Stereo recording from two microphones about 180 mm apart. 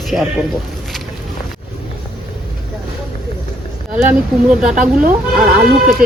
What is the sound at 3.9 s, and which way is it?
Speech, 5° right (ahead or behind).